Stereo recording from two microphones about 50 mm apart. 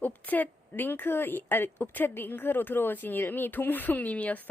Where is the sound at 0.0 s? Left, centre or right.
Left.